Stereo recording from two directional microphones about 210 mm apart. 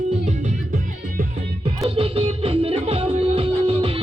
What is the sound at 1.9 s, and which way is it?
Music, 25° right (ahead or behind).